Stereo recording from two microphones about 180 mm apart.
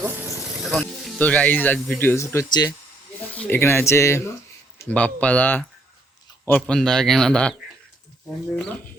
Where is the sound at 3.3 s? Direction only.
10° left (ahead or behind).